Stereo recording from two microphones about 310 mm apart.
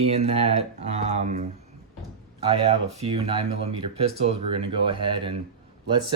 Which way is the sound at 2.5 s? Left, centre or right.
Centre.